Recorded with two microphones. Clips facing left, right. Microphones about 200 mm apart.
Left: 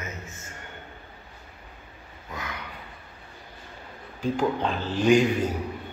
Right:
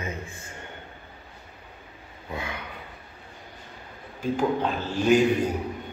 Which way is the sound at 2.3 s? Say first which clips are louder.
Right 3 dB; 30° right (ahead or behind).